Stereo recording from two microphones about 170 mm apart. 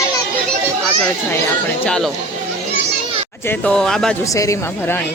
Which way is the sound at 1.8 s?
5° left (ahead or behind).